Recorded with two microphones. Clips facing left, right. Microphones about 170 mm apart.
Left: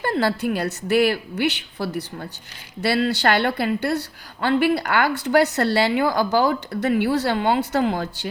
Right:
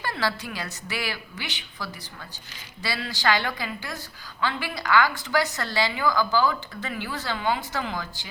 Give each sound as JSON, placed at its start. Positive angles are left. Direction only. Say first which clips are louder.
{"t": 0.0, "sound": "a woman's voice", "louder": "left 8 dB", "side_deg": 50}